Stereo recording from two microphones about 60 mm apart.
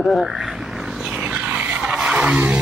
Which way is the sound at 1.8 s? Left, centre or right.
Centre.